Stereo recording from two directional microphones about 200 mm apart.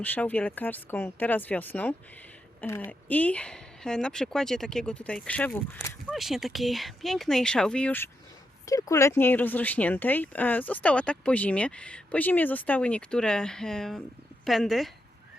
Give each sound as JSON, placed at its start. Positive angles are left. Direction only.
{"t": 0.0, "sound": "speech", "side_deg": 10}